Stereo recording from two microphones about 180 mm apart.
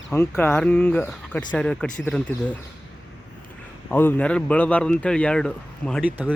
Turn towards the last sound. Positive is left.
turn(degrees=5)  # may be behind; listen again after turning